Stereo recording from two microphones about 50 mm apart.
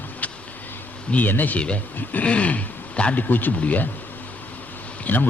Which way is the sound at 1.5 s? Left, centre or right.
Left.